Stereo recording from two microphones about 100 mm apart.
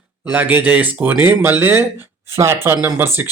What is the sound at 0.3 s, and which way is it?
Speech, 15° right (ahead or behind).